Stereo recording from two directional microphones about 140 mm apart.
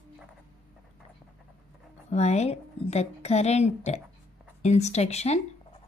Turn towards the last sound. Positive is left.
turn(degrees=50)  # may be behind; listen again after turning